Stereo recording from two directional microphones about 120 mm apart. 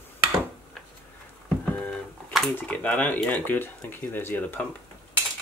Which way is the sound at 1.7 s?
10° left (ahead or behind).